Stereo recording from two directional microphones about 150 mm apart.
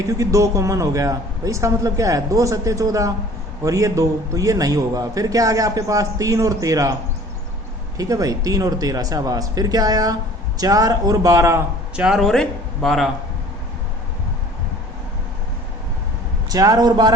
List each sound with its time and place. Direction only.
0.1 s a man's voice: 20° right (ahead or behind)
7.9 s a man's voice: 25° right (ahead or behind)
11.9 s speech: 5° right (ahead or behind)
16.5 s a man's voice: 25° right (ahead or behind)